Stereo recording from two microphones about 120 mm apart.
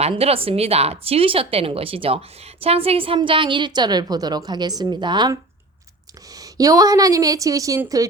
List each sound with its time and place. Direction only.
0.1 s a woman's voice: 50° right (ahead or behind)
6.3 s a woman's voice: 30° right (ahead or behind)